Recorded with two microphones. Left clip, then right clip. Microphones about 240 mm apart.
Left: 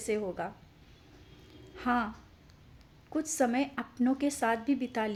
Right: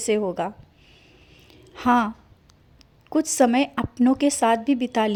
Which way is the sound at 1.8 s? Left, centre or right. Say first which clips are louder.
Right 11 dB; right.